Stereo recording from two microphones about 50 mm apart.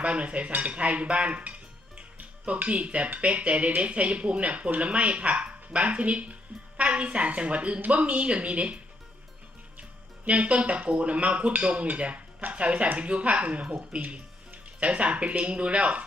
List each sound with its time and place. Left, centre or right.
0.0 s speech: right
10.2 s speech: right